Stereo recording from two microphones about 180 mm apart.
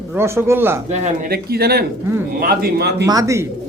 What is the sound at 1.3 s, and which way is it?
Speech, 60° right (ahead or behind).